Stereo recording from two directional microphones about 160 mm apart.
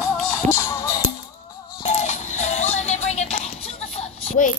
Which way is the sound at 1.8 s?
45° left (ahead or behind).